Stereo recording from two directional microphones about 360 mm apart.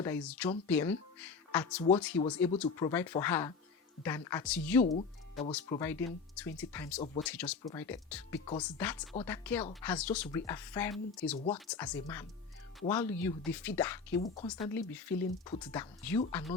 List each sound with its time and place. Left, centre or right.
0.0 s speech: centre
4.8 s speech: centre
11.3 s speech: centre
11.7 s speech: centre
14.2 s speech: centre